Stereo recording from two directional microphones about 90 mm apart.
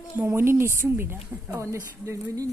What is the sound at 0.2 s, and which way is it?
A woman's voice, 30° right (ahead or behind).